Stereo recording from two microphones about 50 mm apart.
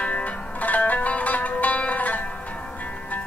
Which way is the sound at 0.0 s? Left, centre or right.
Left.